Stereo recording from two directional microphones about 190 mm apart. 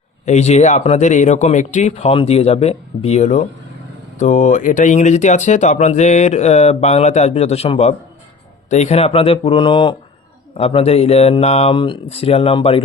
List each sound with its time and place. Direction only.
0.3 s speech: 35° left (ahead or behind)